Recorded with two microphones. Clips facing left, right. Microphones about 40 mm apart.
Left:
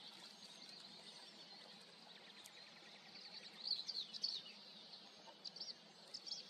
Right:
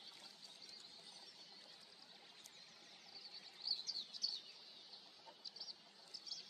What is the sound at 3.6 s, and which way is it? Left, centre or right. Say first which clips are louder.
Bird: even; left.